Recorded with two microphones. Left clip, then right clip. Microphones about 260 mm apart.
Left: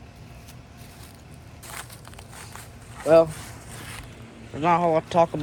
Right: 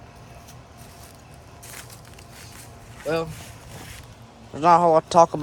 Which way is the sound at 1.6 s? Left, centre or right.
Centre.